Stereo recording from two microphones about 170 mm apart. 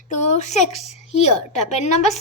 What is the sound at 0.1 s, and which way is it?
A woman's voice, 45° left (ahead or behind).